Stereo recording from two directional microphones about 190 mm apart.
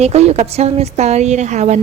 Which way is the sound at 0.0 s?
35° right (ahead or behind).